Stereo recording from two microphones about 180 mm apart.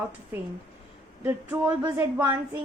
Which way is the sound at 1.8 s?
25° right (ahead or behind).